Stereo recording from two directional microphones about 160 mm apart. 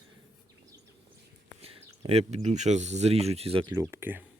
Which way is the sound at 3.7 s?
15° right (ahead or behind).